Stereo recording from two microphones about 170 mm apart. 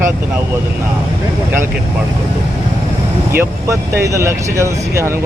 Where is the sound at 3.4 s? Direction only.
15° right (ahead or behind).